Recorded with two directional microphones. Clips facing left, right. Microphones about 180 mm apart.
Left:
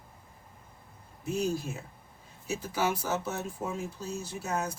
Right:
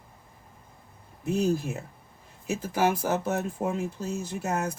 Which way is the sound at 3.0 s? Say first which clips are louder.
Right 5 dB; 60° right (ahead or behind).